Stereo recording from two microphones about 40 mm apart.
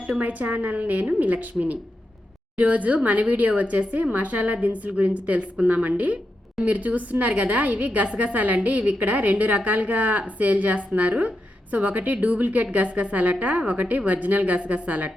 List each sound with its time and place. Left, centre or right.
0.2 s a woman's voice: right